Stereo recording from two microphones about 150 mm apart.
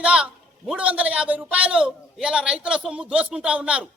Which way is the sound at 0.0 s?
5° right (ahead or behind).